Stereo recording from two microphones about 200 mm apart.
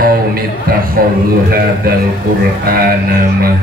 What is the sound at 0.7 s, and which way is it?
Speech, 45° right (ahead or behind).